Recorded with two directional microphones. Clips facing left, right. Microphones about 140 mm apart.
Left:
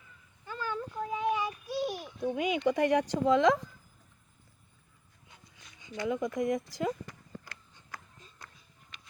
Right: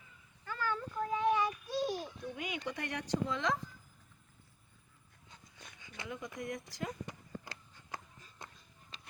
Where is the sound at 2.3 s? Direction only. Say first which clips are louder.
Left 14 dB; 90° left.